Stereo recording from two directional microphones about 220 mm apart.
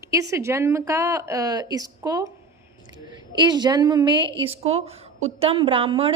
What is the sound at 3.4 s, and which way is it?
Speech, 20° right (ahead or behind).